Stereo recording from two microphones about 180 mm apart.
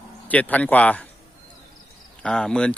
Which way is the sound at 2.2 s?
5° left (ahead or behind).